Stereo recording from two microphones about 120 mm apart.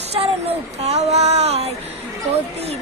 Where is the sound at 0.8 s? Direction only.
65° right (ahead or behind).